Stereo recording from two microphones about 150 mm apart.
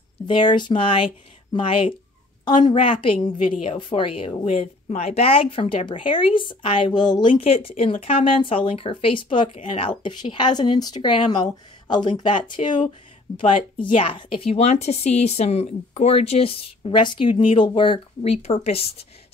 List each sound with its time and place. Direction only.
0.3 s speech: 30° left (ahead or behind)
11.2 s speech: 45° left (ahead or behind)
11.9 s speech: 30° left (ahead or behind)